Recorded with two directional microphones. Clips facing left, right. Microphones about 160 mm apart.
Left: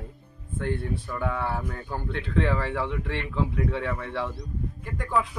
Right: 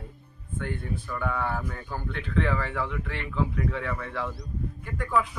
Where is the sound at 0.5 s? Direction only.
30° left (ahead or behind).